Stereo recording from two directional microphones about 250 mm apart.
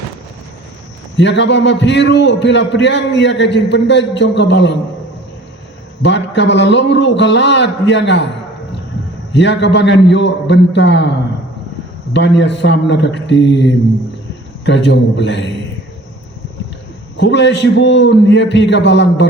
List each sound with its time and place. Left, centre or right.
1.1 s a man's voice: left
6.0 s a man's voice: left
9.3 s a man's voice: left
12.1 s a man's voice: left
17.2 s a man's voice: left